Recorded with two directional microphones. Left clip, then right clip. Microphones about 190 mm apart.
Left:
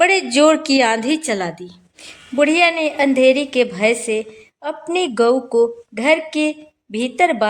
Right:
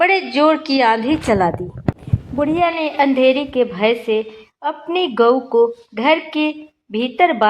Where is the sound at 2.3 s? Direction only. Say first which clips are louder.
Left 3 dB; 25° left (ahead or behind).